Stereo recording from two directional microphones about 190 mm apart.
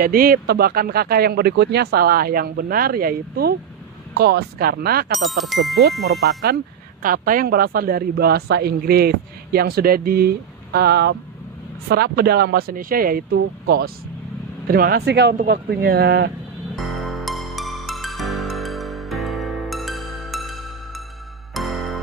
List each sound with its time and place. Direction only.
0.0 s speech: 50° right (ahead or behind)
5.2 s speech: centre (ahead or behind)
6.4 s speech: 50° right (ahead or behind)
16.7 s music: centre (ahead or behind)